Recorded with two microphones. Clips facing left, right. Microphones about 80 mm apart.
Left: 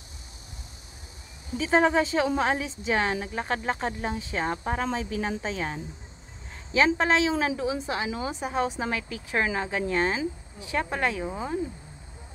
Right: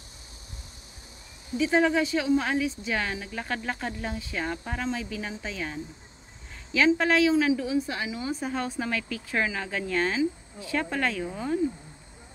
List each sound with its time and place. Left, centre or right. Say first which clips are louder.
1.6 s speech: left 1 dB; left
7.0 s speech: right 1 dB; left